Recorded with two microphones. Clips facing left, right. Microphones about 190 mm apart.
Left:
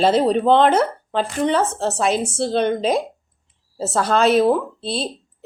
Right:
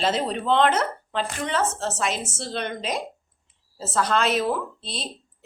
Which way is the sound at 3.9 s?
40° left (ahead or behind).